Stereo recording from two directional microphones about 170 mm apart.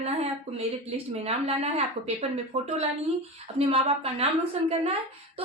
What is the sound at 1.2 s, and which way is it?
A woman's voice, 35° right (ahead or behind).